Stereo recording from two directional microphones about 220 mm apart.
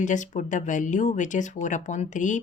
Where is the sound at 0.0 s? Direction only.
35° left (ahead or behind).